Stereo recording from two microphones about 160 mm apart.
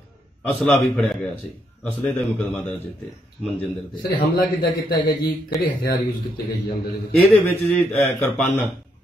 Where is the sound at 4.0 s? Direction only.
65° left (ahead or behind).